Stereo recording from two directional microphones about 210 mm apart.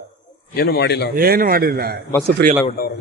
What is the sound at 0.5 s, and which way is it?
Speech, 50° left (ahead or behind).